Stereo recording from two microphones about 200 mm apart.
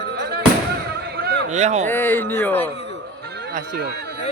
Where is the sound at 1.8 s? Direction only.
10° left (ahead or behind).